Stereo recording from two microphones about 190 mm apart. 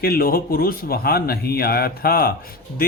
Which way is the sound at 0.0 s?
50° left (ahead or behind).